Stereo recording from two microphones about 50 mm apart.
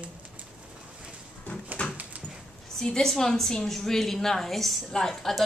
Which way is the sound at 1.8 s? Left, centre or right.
Left.